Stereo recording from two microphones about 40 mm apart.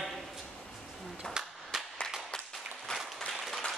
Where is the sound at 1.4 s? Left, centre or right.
Centre.